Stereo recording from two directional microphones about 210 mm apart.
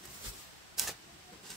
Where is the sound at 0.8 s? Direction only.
Centre (ahead or behind).